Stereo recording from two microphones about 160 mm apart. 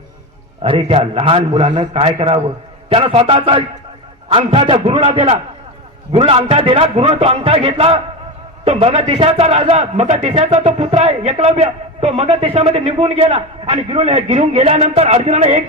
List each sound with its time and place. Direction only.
0.6 s a man's voice: 35° right (ahead or behind)